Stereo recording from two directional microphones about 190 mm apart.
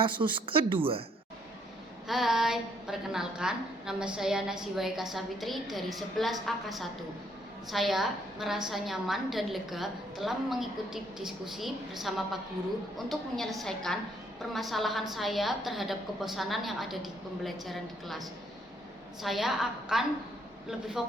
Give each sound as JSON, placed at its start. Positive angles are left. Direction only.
{"t": 0.0, "sound": "speech", "side_deg": -25}
{"t": 2.0, "sound": "a woman's voice", "side_deg": 0}